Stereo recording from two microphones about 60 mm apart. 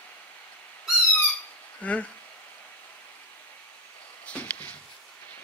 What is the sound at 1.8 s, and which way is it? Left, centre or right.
Speech, left.